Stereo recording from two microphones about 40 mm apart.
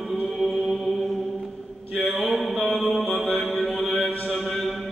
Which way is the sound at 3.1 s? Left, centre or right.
Left.